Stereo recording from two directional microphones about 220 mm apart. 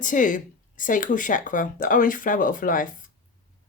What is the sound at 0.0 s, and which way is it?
Speech, 35° left (ahead or behind).